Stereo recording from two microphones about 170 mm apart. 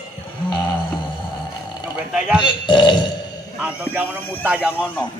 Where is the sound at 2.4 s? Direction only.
25° left (ahead or behind).